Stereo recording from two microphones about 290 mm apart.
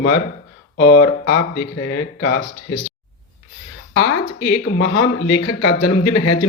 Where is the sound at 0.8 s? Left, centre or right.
Left.